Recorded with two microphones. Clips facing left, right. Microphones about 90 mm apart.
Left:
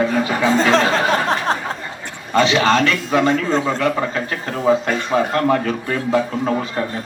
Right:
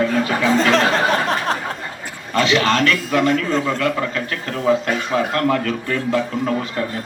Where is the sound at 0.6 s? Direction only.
30° left (ahead or behind).